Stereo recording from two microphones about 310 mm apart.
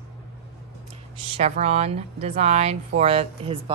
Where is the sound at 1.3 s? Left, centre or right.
Centre.